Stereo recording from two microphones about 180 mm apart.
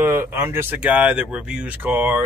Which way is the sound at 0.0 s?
15° right (ahead or behind).